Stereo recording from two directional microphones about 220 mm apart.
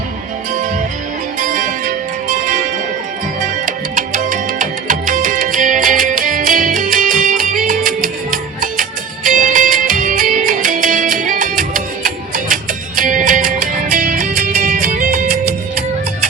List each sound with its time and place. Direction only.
1.4 s music: 35° right (ahead or behind)
3.7 s music: 40° right (ahead or behind)